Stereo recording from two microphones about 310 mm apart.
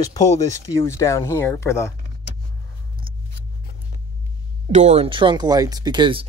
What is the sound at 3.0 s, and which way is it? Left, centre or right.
Scissors, centre.